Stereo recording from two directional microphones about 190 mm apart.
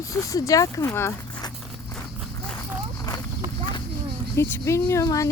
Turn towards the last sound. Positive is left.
turn(degrees=15)  # may be behind; listen again after turning